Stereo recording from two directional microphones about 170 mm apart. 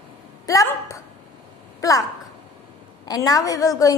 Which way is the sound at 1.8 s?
20° left (ahead or behind).